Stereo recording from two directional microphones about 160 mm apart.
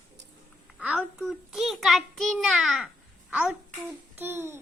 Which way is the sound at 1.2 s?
Centre (ahead or behind).